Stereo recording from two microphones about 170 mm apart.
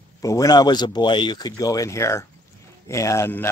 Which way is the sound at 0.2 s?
20° left (ahead or behind).